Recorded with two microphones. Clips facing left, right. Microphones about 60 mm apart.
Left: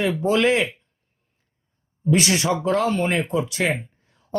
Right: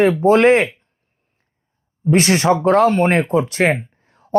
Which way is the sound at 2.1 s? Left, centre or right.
Right.